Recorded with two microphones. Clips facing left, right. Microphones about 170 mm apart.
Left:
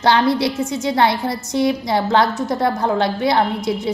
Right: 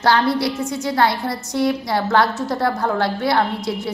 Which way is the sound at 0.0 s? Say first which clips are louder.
Left 2 dB; 20° left (ahead or behind).